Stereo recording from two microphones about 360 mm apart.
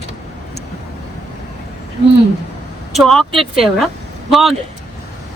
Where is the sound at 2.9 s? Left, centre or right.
Centre.